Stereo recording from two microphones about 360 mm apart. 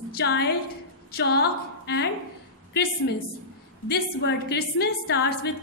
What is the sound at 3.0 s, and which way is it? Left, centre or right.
A woman's voice, left.